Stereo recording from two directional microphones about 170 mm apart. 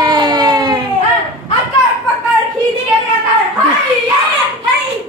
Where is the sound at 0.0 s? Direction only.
25° right (ahead or behind).